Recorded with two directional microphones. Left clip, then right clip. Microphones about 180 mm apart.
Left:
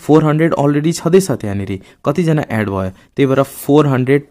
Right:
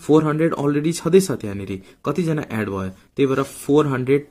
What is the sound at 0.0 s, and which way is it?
Speech, 35° left (ahead or behind).